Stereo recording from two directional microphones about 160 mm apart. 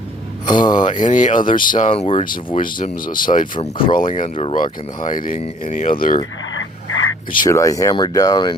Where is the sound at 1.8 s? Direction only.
40° left (ahead or behind).